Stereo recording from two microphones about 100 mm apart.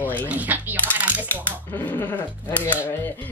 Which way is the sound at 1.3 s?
15° left (ahead or behind).